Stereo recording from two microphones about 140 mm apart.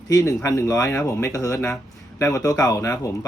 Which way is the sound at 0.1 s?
20° left (ahead or behind).